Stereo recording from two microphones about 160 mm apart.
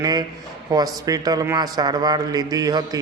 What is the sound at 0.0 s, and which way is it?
Speech, 25° right (ahead or behind).